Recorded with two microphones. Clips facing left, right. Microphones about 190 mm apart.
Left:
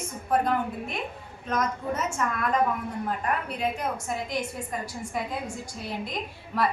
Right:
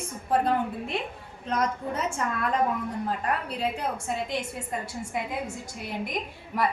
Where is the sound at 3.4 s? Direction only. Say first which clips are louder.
Even; 30° right (ahead or behind).